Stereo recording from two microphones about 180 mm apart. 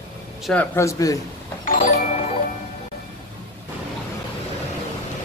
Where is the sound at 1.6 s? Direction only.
50° left (ahead or behind).